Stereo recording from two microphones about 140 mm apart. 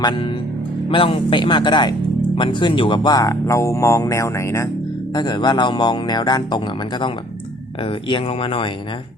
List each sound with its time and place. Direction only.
0.0 s speech: 30° left (ahead or behind)
7.9 s speech: 40° left (ahead or behind)